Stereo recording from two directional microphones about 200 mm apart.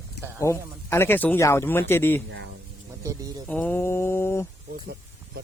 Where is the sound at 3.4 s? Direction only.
10° left (ahead or behind).